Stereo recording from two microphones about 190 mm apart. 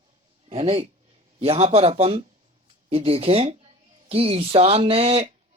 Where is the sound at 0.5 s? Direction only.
30° right (ahead or behind).